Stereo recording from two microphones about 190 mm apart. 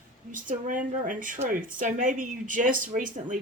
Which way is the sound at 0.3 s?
45° right (ahead or behind).